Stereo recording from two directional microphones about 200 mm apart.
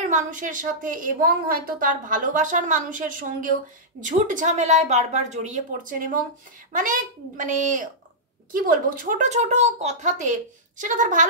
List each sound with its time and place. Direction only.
0.0 s a woman's voice: 40° right (ahead or behind)